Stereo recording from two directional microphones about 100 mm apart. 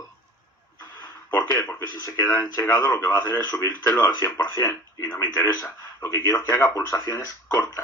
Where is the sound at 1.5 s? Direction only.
25° left (ahead or behind).